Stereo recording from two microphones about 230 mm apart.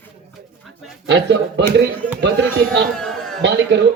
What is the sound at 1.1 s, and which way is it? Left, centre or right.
Speech, right.